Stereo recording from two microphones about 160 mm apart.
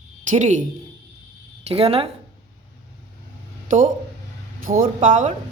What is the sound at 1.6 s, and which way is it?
Speech, 40° right (ahead or behind).